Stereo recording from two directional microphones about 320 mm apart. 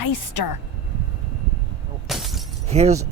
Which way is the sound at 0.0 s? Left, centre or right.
Left.